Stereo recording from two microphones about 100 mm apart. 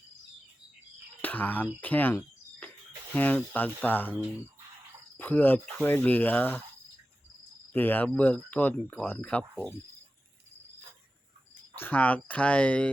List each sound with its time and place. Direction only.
1.2 s speech: 15° left (ahead or behind)
1.8 s a sound: 20° left (ahead or behind)
3.1 s speech: 15° left (ahead or behind)
5.1 s speech: 15° left (ahead or behind)
7.7 s speech: 20° left (ahead or behind)
11.7 s speech: 20° left (ahead or behind)